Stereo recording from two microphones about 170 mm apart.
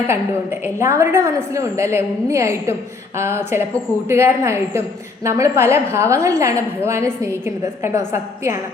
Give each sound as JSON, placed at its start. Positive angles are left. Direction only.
{"t": 0.6, "sound": "a woman's voice", "side_deg": -15}